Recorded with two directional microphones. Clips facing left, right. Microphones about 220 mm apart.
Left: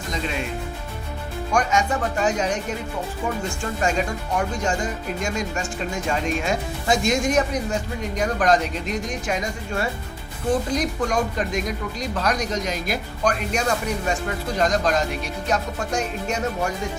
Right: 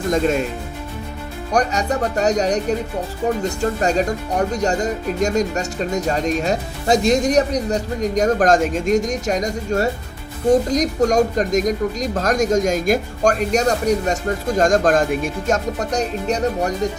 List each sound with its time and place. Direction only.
0.1 s speech: 45° right (ahead or behind)
1.5 s speech: 40° right (ahead or behind)